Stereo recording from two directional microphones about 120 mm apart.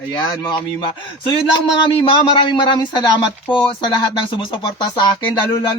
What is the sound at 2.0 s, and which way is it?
Speech, 40° left (ahead or behind).